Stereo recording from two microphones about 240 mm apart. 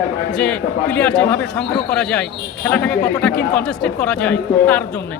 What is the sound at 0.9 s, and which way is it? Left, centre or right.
A man's voice, centre.